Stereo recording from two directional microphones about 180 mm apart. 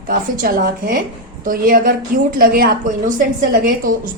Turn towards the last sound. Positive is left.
turn(degrees=-50)  # may be behind; listen again after turning